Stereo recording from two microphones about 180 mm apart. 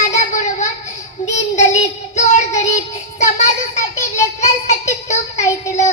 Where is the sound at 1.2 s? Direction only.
40° left (ahead or behind).